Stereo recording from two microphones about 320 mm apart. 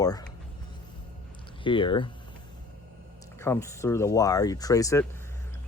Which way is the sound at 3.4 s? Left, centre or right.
Centre.